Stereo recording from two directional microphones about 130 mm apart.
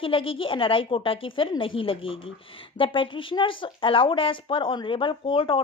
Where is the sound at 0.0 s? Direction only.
45° left (ahead or behind).